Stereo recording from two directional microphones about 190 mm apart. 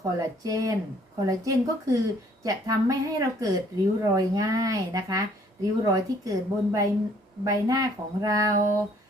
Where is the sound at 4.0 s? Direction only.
20° right (ahead or behind).